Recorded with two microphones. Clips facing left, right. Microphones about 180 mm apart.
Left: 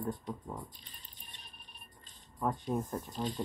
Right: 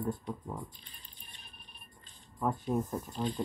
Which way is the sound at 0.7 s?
45° left (ahead or behind).